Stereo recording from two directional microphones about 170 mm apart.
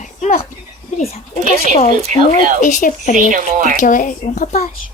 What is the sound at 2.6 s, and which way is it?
Speech, 50° left (ahead or behind).